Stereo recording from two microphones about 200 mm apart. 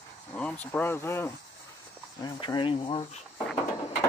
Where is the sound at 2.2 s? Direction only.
20° left (ahead or behind).